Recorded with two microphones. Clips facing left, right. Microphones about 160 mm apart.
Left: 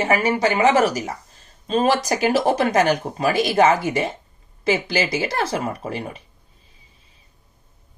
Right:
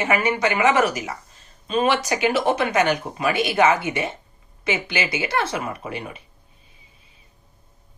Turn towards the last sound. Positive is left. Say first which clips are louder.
# left 3 dB
turn(degrees=35)  # may be behind; listen again after turning